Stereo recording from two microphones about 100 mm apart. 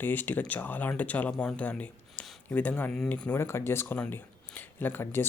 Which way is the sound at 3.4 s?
25° left (ahead or behind).